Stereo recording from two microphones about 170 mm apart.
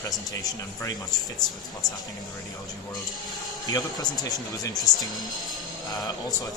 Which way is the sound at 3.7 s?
20° left (ahead or behind).